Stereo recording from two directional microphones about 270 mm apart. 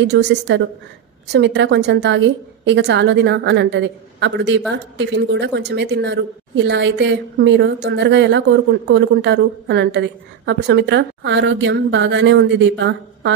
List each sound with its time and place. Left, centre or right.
0.0 s a woman's voice: right